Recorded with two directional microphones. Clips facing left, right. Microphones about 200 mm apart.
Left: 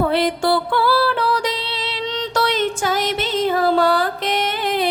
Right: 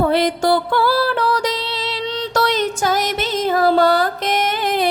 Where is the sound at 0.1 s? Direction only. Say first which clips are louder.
Right 2 dB; 40° right (ahead or behind).